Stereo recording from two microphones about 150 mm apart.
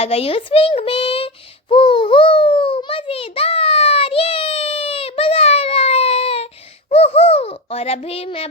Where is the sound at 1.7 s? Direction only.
35° left (ahead or behind).